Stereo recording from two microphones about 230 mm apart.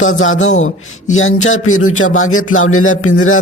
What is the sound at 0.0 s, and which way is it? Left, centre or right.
Music, left.